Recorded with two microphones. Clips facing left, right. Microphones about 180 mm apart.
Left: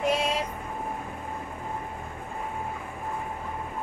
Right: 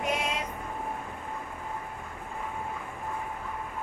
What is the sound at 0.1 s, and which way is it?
Vehicle, 30° left (ahead or behind).